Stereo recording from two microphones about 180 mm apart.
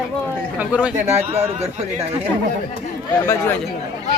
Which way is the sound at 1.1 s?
35° right (ahead or behind).